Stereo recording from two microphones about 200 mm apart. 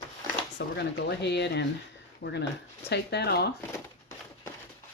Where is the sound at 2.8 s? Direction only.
55° left (ahead or behind).